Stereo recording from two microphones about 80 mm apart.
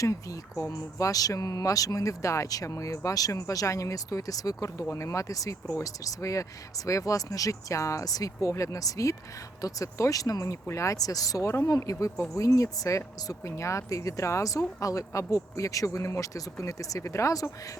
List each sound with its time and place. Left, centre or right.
0.0 s speech: left